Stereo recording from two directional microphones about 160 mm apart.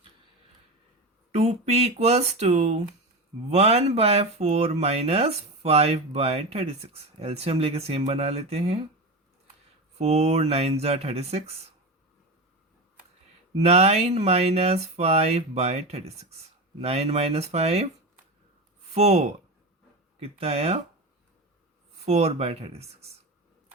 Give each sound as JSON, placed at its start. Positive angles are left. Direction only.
{"t": 1.3, "sound": "speech", "side_deg": -40}
{"t": 10.0, "sound": "speech", "side_deg": -40}
{"t": 13.6, "sound": "speech", "side_deg": -40}
{"t": 18.9, "sound": "speech", "side_deg": -45}
{"t": 22.0, "sound": "speech", "side_deg": -40}